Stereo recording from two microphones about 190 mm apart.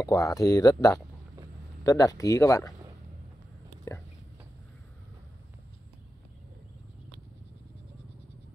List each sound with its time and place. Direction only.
0.0 s speech: 15° left (ahead or behind)